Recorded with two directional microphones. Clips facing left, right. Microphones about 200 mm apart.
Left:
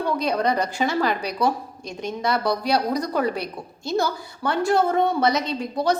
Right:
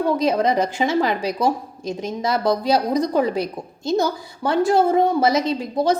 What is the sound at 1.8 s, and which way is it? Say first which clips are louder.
Speech: right 6 dB; 90° right.